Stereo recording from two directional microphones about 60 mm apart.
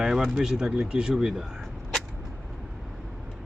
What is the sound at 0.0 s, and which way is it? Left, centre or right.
Speech, centre.